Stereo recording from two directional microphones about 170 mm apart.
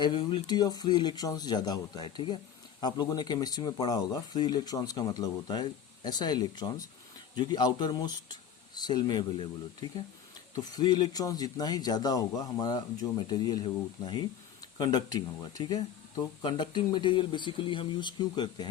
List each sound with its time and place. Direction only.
0.0 s speech: 25° left (ahead or behind)